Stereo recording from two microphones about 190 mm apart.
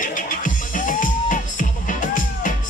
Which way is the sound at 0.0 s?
45° left (ahead or behind).